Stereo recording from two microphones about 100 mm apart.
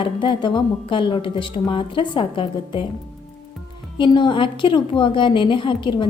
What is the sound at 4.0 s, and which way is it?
A woman's voice, 50° left (ahead or behind).